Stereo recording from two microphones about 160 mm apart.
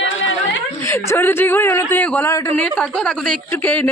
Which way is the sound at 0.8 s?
15° left (ahead or behind).